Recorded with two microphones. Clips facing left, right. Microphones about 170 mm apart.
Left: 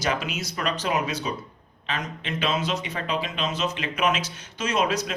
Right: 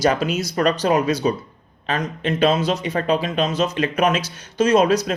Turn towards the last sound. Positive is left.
turn(degrees=-40)  # may be behind; listen again after turning